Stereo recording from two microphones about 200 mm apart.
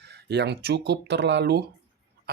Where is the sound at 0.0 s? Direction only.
55° right (ahead or behind).